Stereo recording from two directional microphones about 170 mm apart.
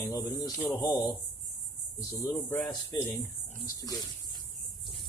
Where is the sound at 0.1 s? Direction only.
20° left (ahead or behind).